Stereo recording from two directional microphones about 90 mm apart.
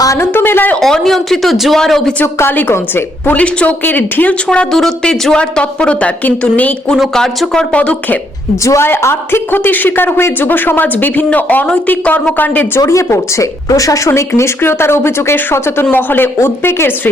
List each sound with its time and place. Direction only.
0.2 s speech: 25° left (ahead or behind)
0.8 s speech: 5° left (ahead or behind)
2.2 s speech: 30° left (ahead or behind)
4.4 s speech: 5° left (ahead or behind)
8.6 s speech: 30° left (ahead or behind)
12.8 s speech: 35° left (ahead or behind)